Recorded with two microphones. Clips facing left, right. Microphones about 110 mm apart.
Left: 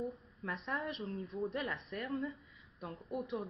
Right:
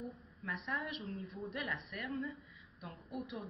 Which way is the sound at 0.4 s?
30° left (ahead or behind).